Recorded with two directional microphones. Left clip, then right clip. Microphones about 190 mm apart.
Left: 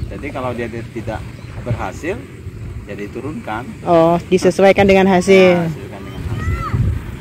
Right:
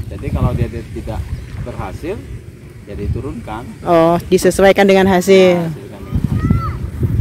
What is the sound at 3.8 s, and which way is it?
Speech, 20° right (ahead or behind).